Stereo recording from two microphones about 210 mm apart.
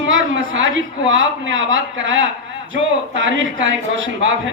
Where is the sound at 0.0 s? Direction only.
65° right (ahead or behind).